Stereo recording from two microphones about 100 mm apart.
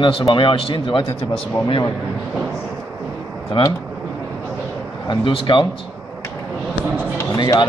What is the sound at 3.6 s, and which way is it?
Speech, 60° left (ahead or behind).